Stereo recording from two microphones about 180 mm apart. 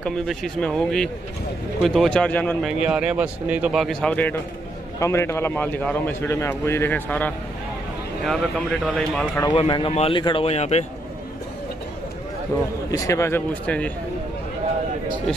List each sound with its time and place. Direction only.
0.0 s a man's voice: 5° left (ahead or behind)
2.6 s a man's voice: 5° right (ahead or behind)
9.4 s speech: 25° left (ahead or behind)
12.5 s a man's voice: 15° left (ahead or behind)